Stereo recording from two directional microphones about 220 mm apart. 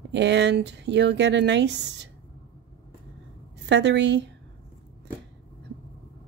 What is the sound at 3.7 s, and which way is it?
Speech, 55° right (ahead or behind).